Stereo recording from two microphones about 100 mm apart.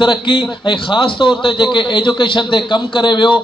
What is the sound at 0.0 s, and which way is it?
A man's voice, 55° left (ahead or behind).